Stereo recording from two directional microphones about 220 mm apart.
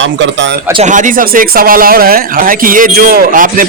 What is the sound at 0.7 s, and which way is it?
Speech, 30° right (ahead or behind).